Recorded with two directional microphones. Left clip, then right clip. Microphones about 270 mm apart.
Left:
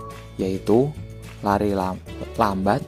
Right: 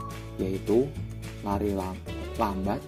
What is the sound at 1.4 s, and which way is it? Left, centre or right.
Speech, left.